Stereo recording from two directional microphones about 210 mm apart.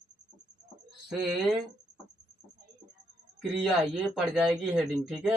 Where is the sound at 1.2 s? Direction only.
Centre (ahead or behind).